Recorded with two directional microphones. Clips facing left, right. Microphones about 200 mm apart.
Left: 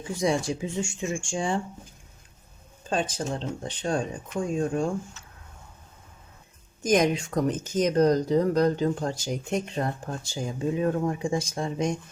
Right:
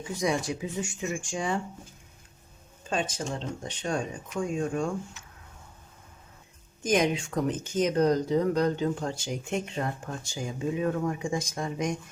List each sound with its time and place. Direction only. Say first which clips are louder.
0.2 s speech: left 3 dB; 30° left (ahead or behind)
2.9 s speech: left 3 dB; 35° left (ahead or behind)
6.8 s speech: left 3 dB; 40° left (ahead or behind)